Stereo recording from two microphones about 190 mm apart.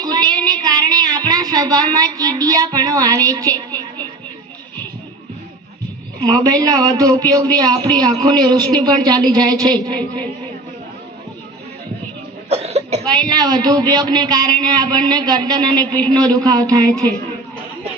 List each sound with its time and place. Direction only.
0.0 s music: 20° right (ahead or behind)
6.1 s speech: 20° right (ahead or behind)
12.5 s cough: 35° right (ahead or behind)
13.1 s speech: 20° right (ahead or behind)